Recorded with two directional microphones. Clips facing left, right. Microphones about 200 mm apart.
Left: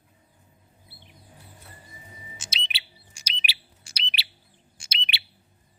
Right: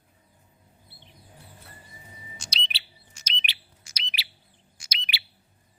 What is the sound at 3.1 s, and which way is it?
Bird, 10° left (ahead or behind).